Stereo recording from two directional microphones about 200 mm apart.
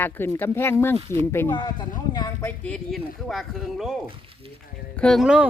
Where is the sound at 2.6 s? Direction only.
5° left (ahead or behind).